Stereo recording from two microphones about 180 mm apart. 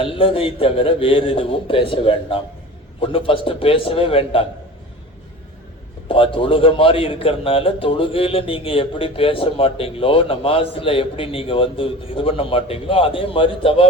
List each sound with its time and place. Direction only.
0.0 s a man's voice: 30° left (ahead or behind)
6.1 s a man's voice: 30° left (ahead or behind)